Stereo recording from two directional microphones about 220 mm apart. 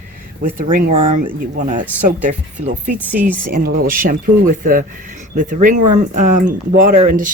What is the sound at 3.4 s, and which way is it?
Speech, 40° right (ahead or behind).